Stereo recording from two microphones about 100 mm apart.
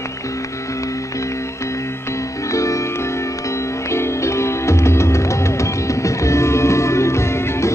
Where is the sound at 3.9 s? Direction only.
30° left (ahead or behind).